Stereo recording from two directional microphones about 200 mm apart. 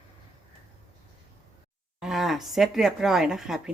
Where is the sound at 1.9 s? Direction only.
Centre (ahead or behind).